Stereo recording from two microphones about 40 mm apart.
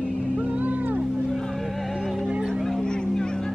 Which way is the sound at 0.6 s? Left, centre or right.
Right.